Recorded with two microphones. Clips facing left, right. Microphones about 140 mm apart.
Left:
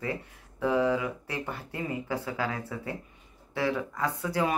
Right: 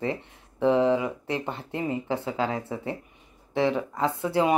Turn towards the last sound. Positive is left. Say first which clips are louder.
# right 5 dB
turn(degrees=-25)  # may be behind; listen again after turning